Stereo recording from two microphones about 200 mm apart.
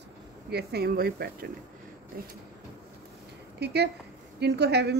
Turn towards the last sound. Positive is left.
turn(degrees=-55)  # may be behind; listen again after turning